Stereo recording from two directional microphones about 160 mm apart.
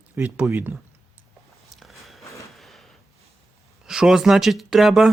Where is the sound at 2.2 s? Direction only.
20° left (ahead or behind).